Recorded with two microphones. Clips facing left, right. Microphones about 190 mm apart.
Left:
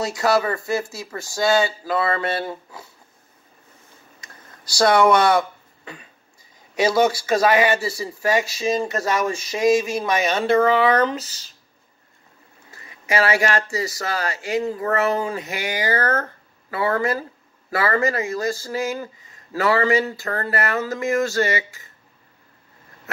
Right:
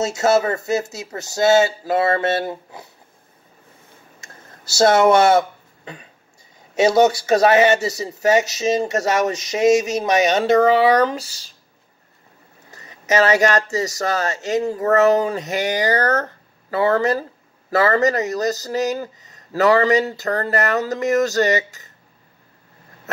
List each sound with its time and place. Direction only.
0.0 s speech: 25° right (ahead or behind)
4.2 s a sound: 25° right (ahead or behind)
6.7 s speech: 25° right (ahead or behind)
10.3 s speech: 40° right (ahead or behind)
11.1 s speech: 10° right (ahead or behind)
12.7 s speech: 40° right (ahead or behind)
14.1 s speech: 25° right (ahead or behind)
14.5 s speech: 40° right (ahead or behind)